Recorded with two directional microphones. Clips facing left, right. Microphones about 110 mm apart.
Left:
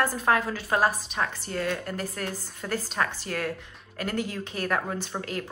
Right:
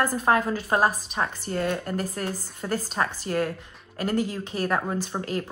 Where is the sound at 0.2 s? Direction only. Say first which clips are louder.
Right 2 dB; 25° right (ahead or behind).